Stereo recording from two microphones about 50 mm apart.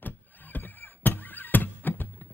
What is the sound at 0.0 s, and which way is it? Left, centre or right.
Neigh, left.